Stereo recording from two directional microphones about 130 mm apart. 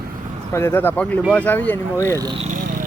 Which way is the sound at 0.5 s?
15° left (ahead or behind).